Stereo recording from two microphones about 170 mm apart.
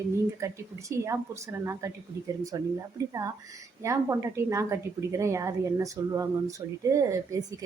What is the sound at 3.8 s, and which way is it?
A woman's voice, 15° right (ahead or behind).